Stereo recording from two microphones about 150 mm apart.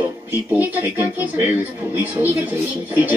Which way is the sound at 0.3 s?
10° right (ahead or behind).